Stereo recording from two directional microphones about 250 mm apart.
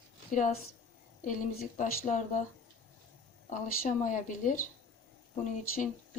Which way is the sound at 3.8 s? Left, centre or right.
Left.